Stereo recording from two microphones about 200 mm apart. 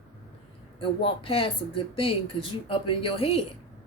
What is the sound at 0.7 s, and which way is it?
Speech, 30° left (ahead or behind).